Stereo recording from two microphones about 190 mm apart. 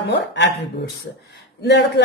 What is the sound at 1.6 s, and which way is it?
Speech, 65° left (ahead or behind).